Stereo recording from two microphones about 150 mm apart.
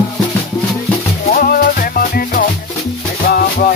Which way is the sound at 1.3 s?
75° left (ahead or behind).